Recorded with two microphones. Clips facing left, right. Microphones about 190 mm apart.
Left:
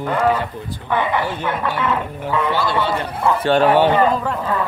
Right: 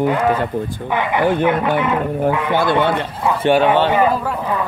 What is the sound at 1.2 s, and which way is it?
Speech, 55° right (ahead or behind).